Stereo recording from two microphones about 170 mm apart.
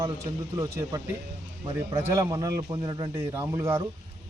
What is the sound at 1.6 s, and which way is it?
Speech, 30° right (ahead or behind).